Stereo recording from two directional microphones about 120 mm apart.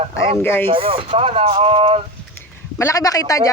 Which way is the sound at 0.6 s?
45° right (ahead or behind).